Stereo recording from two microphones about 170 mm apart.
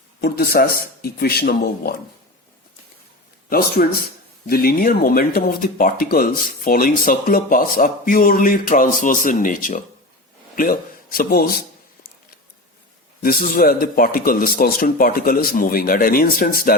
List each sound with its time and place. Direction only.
0.2 s speech: 65° left (ahead or behind)
3.8 s a man's voice: 60° left (ahead or behind)
13.2 s speech: 60° left (ahead or behind)